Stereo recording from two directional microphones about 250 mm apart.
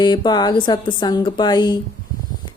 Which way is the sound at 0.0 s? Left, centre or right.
Centre.